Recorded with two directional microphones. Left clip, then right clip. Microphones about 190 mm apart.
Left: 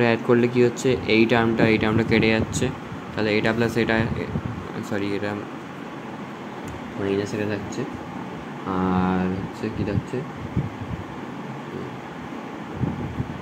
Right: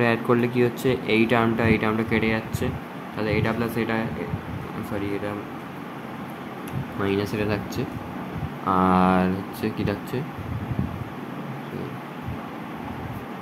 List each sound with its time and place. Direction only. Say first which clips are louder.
0.0 s speech: left 2 dB; 5° left (ahead or behind)
5.0 s speech: left 2 dB; 15° left (ahead or behind)
7.1 s speech: even; 15° right (ahead or behind)